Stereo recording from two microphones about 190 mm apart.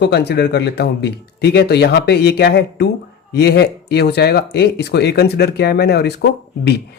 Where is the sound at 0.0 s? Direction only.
60° left (ahead or behind).